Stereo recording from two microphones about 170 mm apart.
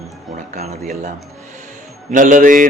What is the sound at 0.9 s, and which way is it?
Speech, 45° right (ahead or behind).